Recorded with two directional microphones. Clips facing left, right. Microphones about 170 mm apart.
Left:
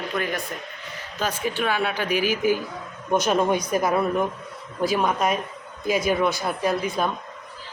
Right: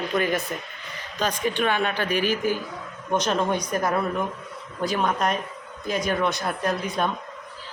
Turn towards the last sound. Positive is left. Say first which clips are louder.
# left 2 dB
turn(degrees=5)  # may be behind; listen again after turning